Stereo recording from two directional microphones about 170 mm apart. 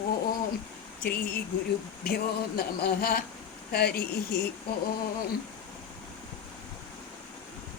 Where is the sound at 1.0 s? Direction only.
60° left (ahead or behind).